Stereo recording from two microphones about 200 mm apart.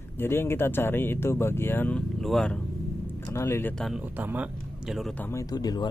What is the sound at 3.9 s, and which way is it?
Speech, 5° right (ahead or behind).